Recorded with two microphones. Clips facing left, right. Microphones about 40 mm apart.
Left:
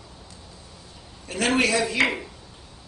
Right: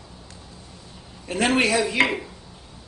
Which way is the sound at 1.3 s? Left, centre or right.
Right.